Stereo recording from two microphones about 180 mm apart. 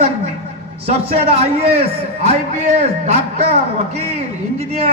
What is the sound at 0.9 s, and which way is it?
Speech, 35° right (ahead or behind).